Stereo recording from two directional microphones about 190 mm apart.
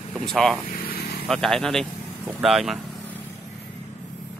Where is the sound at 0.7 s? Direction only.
50° left (ahead or behind).